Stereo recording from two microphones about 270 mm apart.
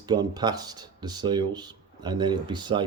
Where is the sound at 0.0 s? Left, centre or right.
Centre.